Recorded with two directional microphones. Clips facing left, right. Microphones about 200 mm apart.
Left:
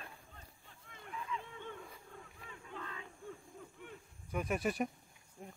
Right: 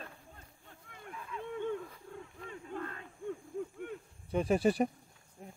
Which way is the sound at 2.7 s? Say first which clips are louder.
Right 6 dB; 50° right (ahead or behind).